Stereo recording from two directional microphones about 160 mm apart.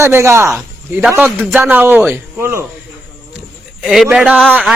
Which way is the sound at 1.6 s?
10° right (ahead or behind).